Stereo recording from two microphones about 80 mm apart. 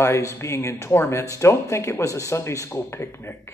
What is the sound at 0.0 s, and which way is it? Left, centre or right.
A man's voice, left.